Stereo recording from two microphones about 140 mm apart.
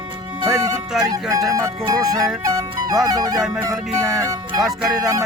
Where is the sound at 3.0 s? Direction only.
25° right (ahead or behind).